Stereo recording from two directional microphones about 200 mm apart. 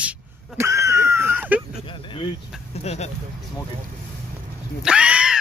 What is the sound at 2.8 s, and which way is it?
Speech, 35° left (ahead or behind).